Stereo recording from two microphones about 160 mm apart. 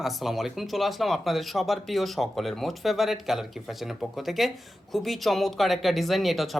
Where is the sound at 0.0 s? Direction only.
Centre (ahead or behind).